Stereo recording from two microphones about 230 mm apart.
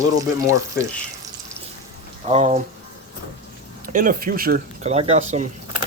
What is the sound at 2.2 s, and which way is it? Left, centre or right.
Speech, right.